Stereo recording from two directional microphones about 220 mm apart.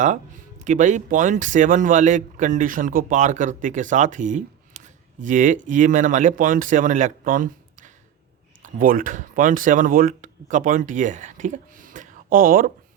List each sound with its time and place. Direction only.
0.6 s speech: 35° right (ahead or behind)